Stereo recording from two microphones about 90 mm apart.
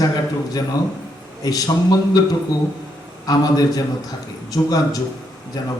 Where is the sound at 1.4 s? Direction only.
40° left (ahead or behind).